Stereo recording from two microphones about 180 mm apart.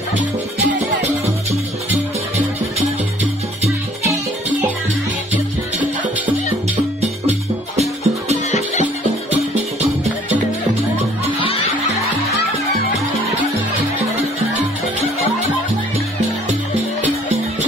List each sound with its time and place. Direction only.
7.0 s music: 35° right (ahead or behind)
8.5 s music: 40° left (ahead or behind)